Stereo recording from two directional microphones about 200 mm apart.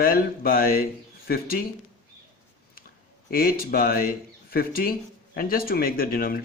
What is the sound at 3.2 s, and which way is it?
Speech, 50° left (ahead or behind).